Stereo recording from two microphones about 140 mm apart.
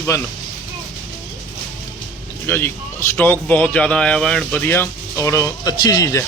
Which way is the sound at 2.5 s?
15° left (ahead or behind).